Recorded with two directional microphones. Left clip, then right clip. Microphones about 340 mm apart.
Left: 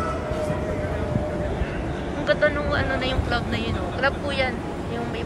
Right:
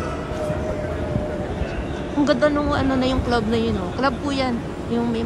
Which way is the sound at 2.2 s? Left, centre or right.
Centre.